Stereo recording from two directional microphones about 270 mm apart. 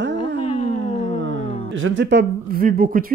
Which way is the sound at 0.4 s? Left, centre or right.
Left.